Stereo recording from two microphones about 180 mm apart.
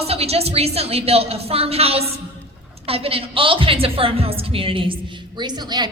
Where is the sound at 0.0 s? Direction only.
35° right (ahead or behind).